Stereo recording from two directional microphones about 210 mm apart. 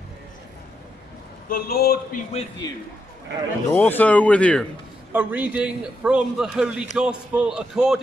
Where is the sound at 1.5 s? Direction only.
45° left (ahead or behind).